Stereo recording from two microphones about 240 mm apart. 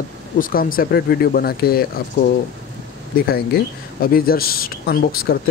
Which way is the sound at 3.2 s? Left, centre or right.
Left.